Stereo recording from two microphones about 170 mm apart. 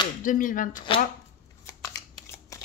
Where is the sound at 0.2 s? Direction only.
50° left (ahead or behind).